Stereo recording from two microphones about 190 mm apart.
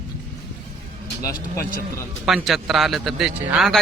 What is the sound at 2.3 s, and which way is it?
A man's voice, centre (ahead or behind).